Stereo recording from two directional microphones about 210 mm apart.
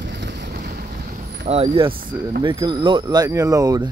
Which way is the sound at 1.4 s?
30° right (ahead or behind).